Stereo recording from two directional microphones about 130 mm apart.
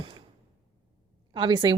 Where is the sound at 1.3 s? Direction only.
35° right (ahead or behind).